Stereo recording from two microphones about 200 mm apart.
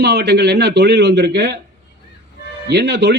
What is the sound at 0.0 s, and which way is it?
A man's voice, 55° right (ahead or behind).